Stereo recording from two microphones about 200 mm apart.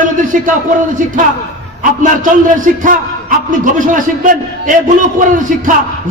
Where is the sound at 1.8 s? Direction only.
40° right (ahead or behind).